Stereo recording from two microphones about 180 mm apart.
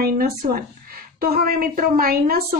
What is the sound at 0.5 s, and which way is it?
A woman's voice, 55° right (ahead or behind).